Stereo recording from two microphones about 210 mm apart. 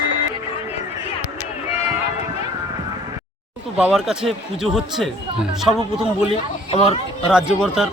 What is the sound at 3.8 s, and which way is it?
Speech, 5° right (ahead or behind).